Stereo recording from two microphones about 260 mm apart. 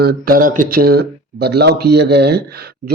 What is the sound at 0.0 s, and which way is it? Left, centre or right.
Speech, right.